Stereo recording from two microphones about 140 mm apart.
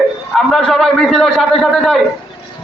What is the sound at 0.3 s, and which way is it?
A man's voice, centre (ahead or behind).